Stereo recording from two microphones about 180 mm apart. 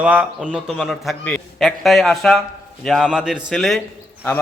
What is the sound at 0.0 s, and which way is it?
A man's voice, 10° right (ahead or behind).